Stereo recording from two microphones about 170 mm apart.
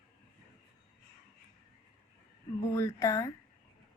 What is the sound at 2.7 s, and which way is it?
Speech, 15° left (ahead or behind).